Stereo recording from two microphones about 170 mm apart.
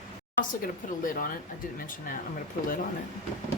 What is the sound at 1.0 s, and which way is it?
Speech, 55° left (ahead or behind).